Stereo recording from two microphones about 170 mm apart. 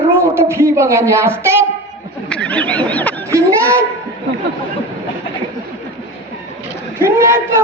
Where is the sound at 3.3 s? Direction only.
15° right (ahead or behind).